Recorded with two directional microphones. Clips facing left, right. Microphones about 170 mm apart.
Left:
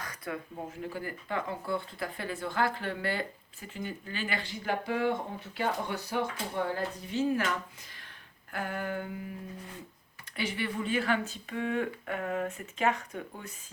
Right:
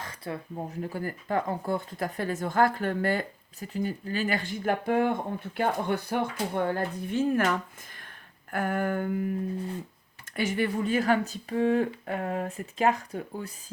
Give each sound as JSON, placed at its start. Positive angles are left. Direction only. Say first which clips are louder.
{"t": 0.0, "sound": "a sound", "louder": "right 2 dB", "side_deg": -25}
{"t": 0.7, "sound": "speech", "louder": "right 4 dB", "side_deg": -40}
{"t": 8.5, "sound": "speech", "louder": "right 6 dB", "side_deg": -50}
{"t": 10.3, "sound": "speech", "louder": "right 6 dB", "side_deg": -45}